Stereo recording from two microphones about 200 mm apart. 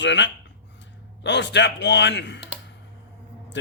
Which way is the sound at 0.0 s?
65° left (ahead or behind).